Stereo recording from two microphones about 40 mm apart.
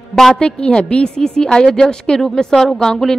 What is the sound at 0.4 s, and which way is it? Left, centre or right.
A woman's voice, left.